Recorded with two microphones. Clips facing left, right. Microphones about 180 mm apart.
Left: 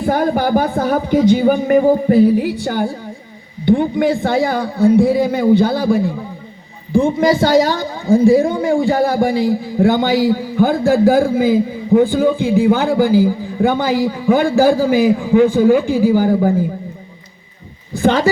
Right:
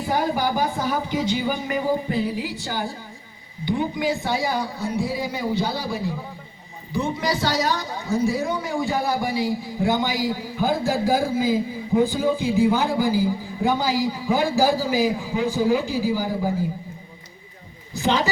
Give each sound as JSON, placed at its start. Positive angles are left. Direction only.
{"t": 0.0, "sound": "a man's voice", "side_deg": 55}
{"t": 17.9, "sound": "a man's voice", "side_deg": 50}